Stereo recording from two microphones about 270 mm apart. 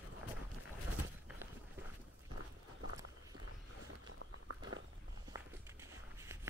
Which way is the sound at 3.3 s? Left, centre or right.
Right.